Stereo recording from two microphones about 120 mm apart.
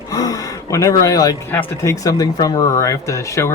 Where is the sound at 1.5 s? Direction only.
20° left (ahead or behind).